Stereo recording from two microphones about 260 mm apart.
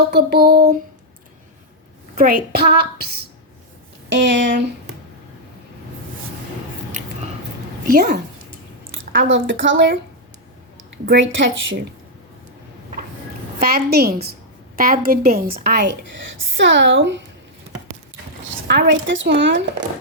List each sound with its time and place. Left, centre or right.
0.1 s a woman's voice: right
2.1 s a woman's voice: right
4.3 s speech: right
7.9 s a woman's voice: right
9.1 s speech: right
13.6 s a woman's voice: right
18.7 s speech: right